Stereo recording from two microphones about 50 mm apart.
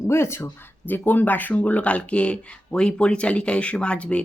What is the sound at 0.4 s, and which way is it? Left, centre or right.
Speech, left.